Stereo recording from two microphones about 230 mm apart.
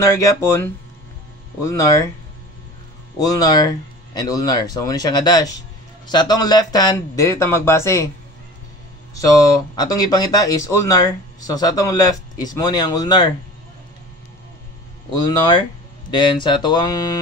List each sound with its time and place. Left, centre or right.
0.0 s speech: centre
3.2 s speech: centre
9.8 s speech: centre
15.2 s speech: centre